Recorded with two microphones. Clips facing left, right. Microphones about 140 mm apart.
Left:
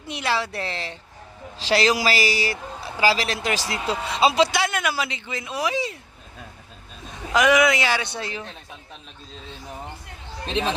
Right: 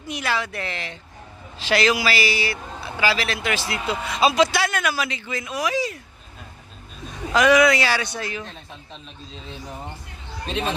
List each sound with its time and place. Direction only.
0.1 s speech: 30° left (ahead or behind)
7.3 s speech: 20° left (ahead or behind)